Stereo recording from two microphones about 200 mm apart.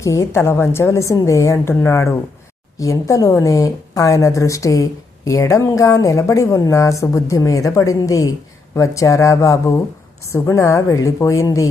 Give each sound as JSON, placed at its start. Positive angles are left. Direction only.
{"t": 0.0, "sound": "a woman's voice", "side_deg": 15}